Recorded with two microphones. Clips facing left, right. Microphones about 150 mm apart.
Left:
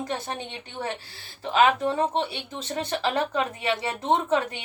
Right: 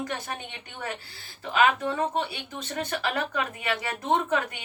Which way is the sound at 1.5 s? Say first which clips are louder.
Left 3 dB; 25° left (ahead or behind).